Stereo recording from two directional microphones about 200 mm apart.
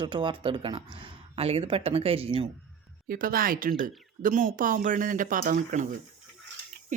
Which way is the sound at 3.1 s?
45° right (ahead or behind).